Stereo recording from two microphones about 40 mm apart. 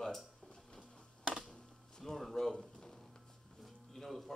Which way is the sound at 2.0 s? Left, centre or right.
Centre.